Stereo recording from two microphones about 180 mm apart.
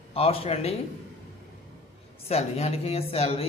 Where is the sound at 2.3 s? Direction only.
35° left (ahead or behind).